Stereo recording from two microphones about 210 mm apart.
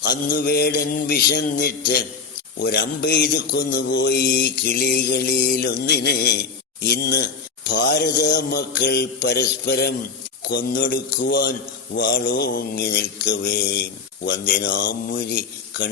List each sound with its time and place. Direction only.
0.0 s a man's voice: 45° left (ahead or behind)